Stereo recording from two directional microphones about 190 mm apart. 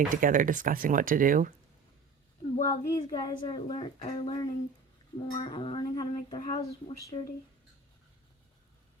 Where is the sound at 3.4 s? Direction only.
25° left (ahead or behind).